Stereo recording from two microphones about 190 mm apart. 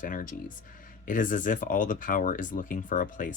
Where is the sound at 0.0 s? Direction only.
45° left (ahead or behind).